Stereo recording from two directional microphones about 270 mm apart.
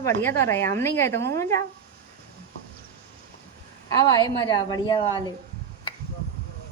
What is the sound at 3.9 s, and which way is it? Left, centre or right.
A woman's voice, centre.